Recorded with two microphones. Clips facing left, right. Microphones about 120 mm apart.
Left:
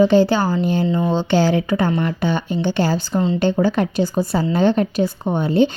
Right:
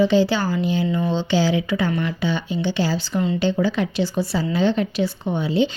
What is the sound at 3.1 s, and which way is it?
Speech, 30° left (ahead or behind).